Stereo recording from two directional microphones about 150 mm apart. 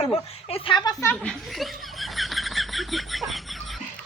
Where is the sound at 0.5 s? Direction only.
35° left (ahead or behind).